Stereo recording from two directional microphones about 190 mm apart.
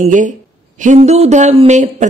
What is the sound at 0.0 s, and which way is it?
Speech, 40° right (ahead or behind).